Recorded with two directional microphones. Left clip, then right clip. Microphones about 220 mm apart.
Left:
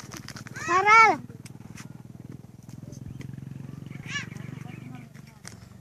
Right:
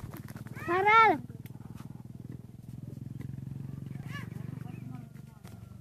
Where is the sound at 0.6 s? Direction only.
25° right (ahead or behind).